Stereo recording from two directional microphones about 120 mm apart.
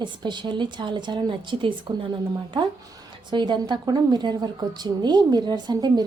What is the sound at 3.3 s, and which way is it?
A woman's voice, 40° right (ahead or behind).